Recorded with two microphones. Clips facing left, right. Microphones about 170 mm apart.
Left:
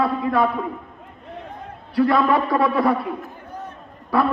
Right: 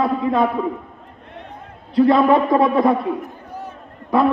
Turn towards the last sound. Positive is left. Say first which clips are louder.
# right 3 dB
turn(degrees=-20)  # may be behind; listen again after turning